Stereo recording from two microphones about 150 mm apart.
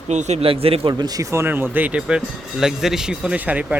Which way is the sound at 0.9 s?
25° right (ahead or behind).